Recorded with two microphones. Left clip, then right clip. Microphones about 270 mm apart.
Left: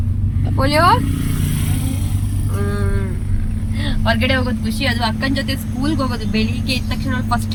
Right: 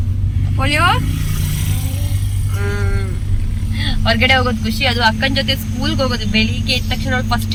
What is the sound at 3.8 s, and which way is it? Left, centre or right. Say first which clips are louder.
Speech: right 3 dB; centre.